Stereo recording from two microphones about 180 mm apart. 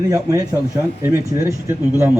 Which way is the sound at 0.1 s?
20° right (ahead or behind).